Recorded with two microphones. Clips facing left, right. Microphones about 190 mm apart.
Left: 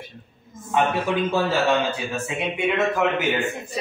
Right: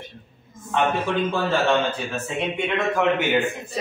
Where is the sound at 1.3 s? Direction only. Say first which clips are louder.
Even; 10° left (ahead or behind).